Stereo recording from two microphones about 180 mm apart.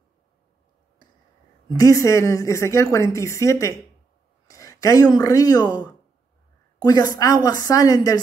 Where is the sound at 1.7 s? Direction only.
20° left (ahead or behind).